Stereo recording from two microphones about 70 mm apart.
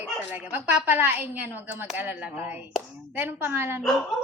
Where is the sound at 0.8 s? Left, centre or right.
Right.